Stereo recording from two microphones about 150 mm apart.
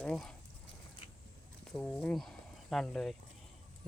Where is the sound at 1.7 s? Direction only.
5° left (ahead or behind).